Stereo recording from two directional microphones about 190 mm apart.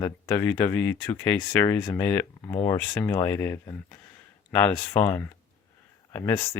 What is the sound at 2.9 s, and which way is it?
Speech, 15° left (ahead or behind).